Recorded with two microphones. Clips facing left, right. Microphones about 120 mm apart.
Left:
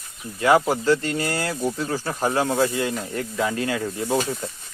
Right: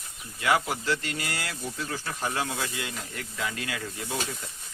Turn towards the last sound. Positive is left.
turn(degrees=40)  # may be behind; listen again after turning